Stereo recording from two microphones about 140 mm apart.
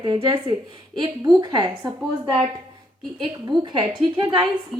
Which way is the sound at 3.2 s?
35° right (ahead or behind).